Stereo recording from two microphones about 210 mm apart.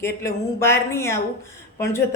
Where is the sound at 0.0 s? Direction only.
10° left (ahead or behind).